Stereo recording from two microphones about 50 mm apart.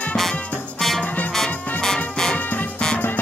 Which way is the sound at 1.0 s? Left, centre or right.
Left.